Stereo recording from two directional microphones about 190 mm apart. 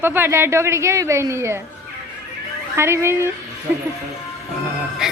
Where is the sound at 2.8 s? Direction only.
15° right (ahead or behind).